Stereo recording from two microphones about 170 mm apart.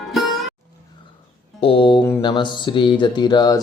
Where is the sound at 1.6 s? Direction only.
30° left (ahead or behind).